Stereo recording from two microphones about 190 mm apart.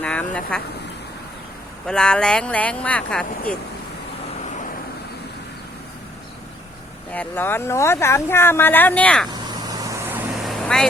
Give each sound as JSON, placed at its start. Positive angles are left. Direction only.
{"t": 0.0, "sound": "speech", "side_deg": 5}
{"t": 1.9, "sound": "speech", "side_deg": 5}
{"t": 7.1, "sound": "speech", "side_deg": 10}
{"t": 9.5, "sound": "vehicle", "side_deg": -20}
{"t": 10.3, "sound": "vehicle", "side_deg": 0}